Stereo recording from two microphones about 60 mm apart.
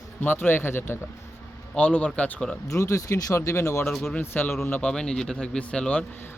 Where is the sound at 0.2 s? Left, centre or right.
Left.